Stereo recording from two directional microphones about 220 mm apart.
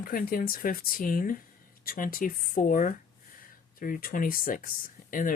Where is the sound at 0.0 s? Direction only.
40° left (ahead or behind).